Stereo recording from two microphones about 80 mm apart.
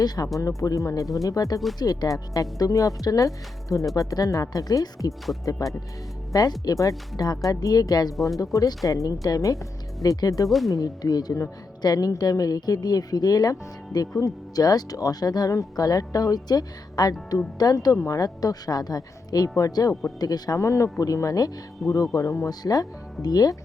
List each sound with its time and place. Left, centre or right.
0.3 s a woman's voice: left
17.9 s speech: left
18.2 s a woman's voice: left
22.4 s speech: left